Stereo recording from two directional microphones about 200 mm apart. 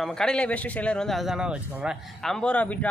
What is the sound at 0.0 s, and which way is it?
A man's voice, 5° left (ahead or behind).